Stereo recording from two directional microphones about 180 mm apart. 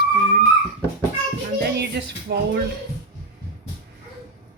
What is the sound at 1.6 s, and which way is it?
Speech, 65° right (ahead or behind).